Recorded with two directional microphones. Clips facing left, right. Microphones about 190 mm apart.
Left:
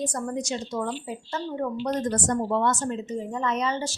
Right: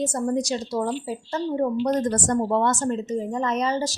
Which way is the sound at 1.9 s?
45° right (ahead or behind).